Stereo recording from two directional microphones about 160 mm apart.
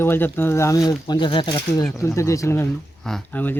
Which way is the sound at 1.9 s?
20° left (ahead or behind).